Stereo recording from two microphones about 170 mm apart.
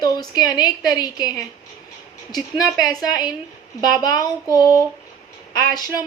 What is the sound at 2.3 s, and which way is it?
A woman's voice, 25° left (ahead or behind).